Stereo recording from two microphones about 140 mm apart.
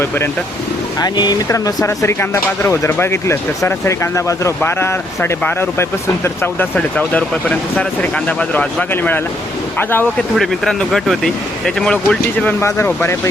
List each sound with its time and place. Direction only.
0.9 s speech: 30° left (ahead or behind); by 10.1 s 15° left (ahead or behind)
10.3 s speech: centre (ahead or behind)